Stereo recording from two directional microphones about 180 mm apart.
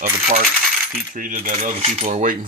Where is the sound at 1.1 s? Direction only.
50° right (ahead or behind).